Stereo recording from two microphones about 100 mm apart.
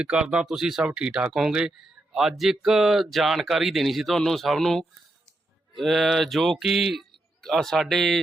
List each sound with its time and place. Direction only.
0.0 s speech: 10° right (ahead or behind)